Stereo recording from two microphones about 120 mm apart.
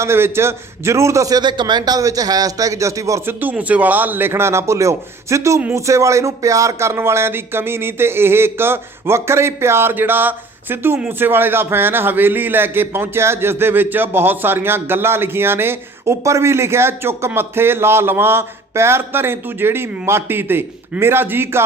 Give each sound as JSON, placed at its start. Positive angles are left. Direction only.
{"t": 0.0, "sound": "a man's voice", "side_deg": -20}
{"t": 3.4, "sound": "a man's voice", "side_deg": -10}